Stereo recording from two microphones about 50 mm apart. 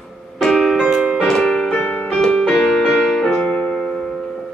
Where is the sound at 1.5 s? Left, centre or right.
Centre.